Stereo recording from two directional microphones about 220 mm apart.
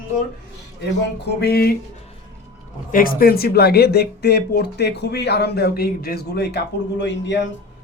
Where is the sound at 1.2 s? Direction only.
50° left (ahead or behind).